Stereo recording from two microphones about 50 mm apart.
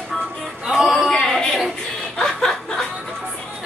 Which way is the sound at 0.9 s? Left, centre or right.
Centre.